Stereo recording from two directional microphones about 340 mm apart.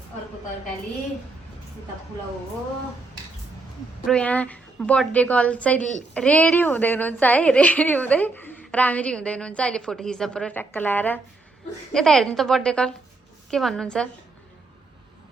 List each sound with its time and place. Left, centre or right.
4.0 s a woman's voice: centre